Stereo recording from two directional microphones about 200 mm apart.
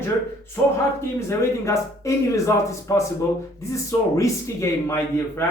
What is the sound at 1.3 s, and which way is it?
Speech, 15° left (ahead or behind).